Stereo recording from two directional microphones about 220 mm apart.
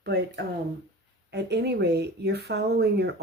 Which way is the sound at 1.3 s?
50° right (ahead or behind).